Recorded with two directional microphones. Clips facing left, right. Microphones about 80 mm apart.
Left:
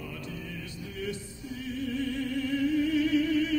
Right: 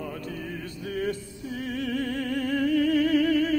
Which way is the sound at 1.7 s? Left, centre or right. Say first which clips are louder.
Right 2 dB; right.